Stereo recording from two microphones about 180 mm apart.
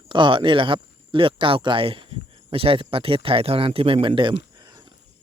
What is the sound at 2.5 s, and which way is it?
Speech, 30° right (ahead or behind).